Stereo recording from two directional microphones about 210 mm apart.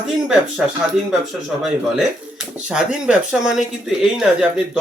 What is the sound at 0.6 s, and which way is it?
Speech, 5° right (ahead or behind).